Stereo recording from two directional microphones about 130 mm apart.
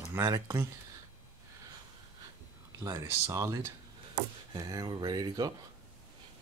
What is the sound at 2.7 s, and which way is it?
Speech, 25° right (ahead or behind).